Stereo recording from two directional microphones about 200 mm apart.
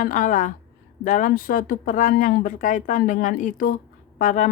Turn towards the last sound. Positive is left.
turn(degrees=40)  # may be behind; listen again after turning